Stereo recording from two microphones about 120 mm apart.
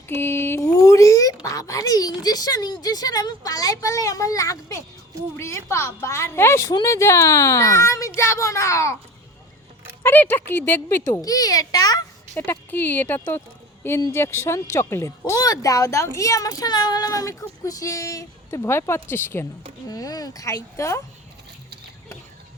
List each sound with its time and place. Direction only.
0.1 s a sound: 20° left (ahead or behind)
1.5 s speech: 25° left (ahead or behind)
10.0 s speech: 15° left (ahead or behind)
11.0 s speech: 30° left (ahead or behind)
12.4 s speech: 15° left (ahead or behind)
19.9 s speech: 30° left (ahead or behind)